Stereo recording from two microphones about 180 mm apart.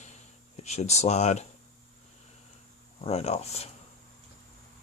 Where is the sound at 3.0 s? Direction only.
35° left (ahead or behind).